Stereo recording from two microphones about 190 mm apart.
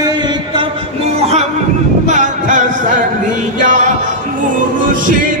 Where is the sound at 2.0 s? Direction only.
40° right (ahead or behind).